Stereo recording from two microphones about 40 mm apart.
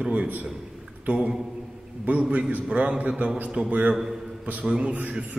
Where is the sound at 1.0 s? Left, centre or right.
Right.